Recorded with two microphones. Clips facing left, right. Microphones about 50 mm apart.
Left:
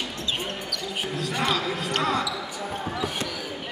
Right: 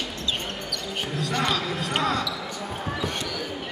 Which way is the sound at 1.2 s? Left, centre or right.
Centre.